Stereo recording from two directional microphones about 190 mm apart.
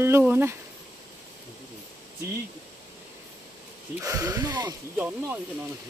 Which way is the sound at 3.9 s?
15° right (ahead or behind).